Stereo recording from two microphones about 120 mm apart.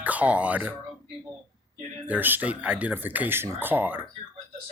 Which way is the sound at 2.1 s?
15° right (ahead or behind).